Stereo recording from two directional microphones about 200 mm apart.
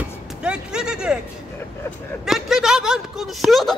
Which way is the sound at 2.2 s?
Centre (ahead or behind).